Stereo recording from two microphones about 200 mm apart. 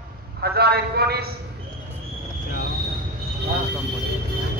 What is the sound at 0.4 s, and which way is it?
Speech, 55° right (ahead or behind).